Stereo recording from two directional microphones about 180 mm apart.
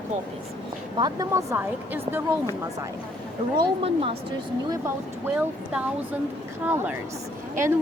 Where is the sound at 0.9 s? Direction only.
20° right (ahead or behind).